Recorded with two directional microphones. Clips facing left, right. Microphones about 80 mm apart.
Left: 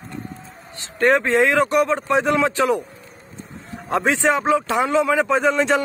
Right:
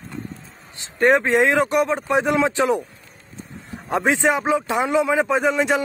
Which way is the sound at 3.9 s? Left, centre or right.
Right.